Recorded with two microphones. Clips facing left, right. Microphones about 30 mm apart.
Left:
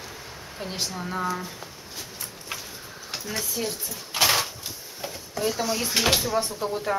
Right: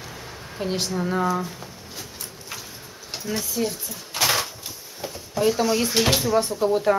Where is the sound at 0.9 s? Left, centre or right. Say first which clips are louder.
Right 6 dB; centre.